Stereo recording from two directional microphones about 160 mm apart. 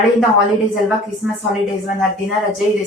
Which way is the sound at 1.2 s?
5° right (ahead or behind).